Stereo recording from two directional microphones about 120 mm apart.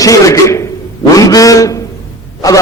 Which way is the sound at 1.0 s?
30° left (ahead or behind).